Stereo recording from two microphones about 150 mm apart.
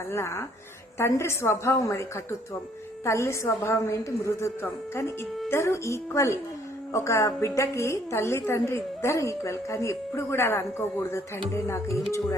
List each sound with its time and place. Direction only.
0.1 s a woman's voice: 15° left (ahead or behind)